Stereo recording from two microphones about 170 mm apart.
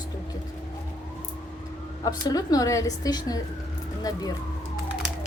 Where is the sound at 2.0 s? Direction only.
20° left (ahead or behind).